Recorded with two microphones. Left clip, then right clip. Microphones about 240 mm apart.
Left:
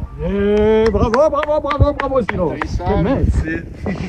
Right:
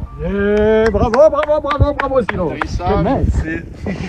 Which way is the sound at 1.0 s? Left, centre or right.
Centre.